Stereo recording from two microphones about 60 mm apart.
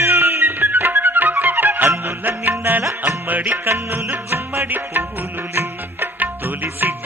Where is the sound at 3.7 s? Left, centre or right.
Right.